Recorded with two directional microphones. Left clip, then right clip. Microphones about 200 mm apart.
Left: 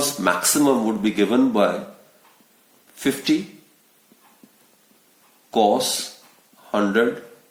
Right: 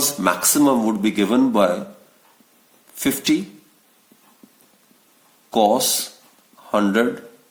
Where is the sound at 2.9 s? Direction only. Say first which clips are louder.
Right 1 dB; 40° right (ahead or behind).